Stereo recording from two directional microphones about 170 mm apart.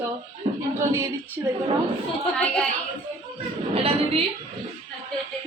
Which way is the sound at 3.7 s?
35° right (ahead or behind).